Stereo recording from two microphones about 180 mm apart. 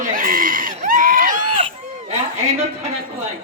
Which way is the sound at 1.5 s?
35° right (ahead or behind).